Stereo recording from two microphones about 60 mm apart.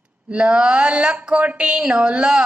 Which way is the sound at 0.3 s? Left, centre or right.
Centre.